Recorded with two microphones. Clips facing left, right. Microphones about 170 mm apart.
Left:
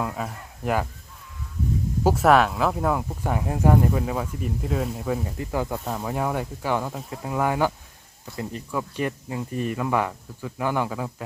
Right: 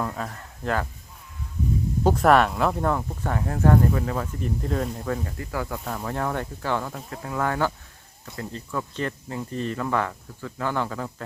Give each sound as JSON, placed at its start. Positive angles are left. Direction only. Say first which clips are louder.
{"t": 0.0, "sound": "speech", "louder": "left 1 dB", "side_deg": 10}
{"t": 2.0, "sound": "speech", "louder": "even", "side_deg": 5}